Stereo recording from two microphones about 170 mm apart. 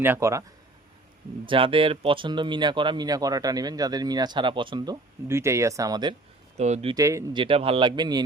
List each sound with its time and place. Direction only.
0.0 s speech: 15° right (ahead or behind)
1.5 s speech: 30° right (ahead or behind)
6.6 s speech: 40° right (ahead or behind)
6.9 s speech: 20° right (ahead or behind)
7.3 s speech: 30° right (ahead or behind)